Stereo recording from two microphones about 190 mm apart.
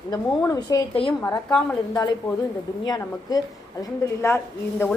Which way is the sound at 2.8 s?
20° left (ahead or behind).